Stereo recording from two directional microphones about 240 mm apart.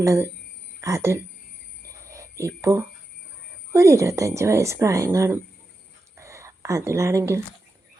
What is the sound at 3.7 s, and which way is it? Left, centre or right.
A woman's voice, centre.